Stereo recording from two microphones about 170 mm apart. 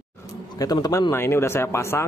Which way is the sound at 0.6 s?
20° left (ahead or behind).